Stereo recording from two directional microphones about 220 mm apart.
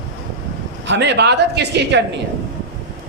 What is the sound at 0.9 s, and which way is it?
A man's voice, 50° right (ahead or behind).